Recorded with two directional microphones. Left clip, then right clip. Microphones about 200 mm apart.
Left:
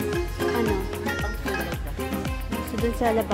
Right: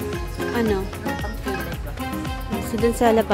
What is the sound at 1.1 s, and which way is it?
Music, centre (ahead or behind).